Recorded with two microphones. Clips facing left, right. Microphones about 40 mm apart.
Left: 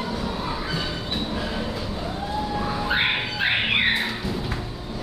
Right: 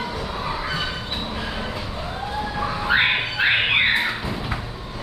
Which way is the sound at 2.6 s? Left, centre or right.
Centre.